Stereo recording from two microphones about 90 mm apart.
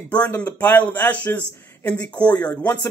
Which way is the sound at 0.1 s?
15° left (ahead or behind).